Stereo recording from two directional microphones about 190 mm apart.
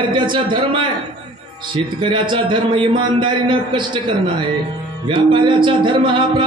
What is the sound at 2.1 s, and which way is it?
Speech, 25° right (ahead or behind).